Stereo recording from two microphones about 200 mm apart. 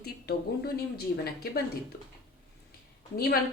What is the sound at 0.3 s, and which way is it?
A woman's voice, 50° left (ahead or behind).